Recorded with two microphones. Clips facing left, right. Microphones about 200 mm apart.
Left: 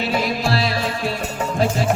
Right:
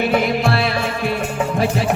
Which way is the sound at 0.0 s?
55° right (ahead or behind).